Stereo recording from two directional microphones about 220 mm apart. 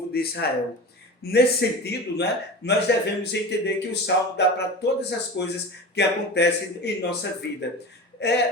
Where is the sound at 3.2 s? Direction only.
50° left (ahead or behind).